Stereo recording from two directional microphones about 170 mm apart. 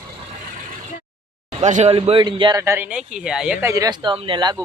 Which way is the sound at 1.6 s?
40° right (ahead or behind).